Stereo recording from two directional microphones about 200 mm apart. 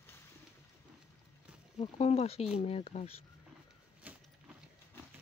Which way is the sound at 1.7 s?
30° left (ahead or behind).